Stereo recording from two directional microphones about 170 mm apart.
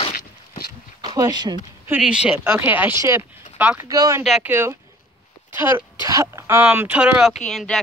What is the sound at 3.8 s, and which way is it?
Speech, 20° right (ahead or behind).